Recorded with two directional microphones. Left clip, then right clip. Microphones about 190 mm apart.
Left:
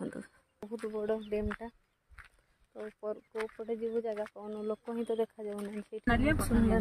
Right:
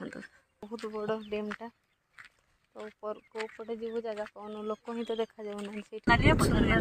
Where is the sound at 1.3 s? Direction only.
Centre (ahead or behind).